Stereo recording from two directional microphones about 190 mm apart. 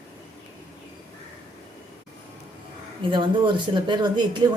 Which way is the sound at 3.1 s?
25° right (ahead or behind).